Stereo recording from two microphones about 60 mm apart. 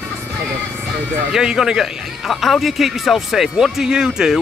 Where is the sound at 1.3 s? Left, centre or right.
Centre.